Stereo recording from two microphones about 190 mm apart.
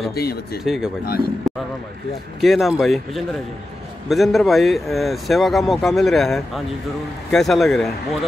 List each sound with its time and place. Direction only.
0.1 s speech: 55° left (ahead or behind)
0.7 s speech: centre (ahead or behind)
2.4 s speech: centre (ahead or behind)